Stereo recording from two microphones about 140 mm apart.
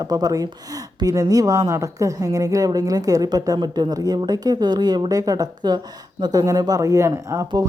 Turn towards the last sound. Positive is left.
turn(degrees=-20)  # may be behind; listen again after turning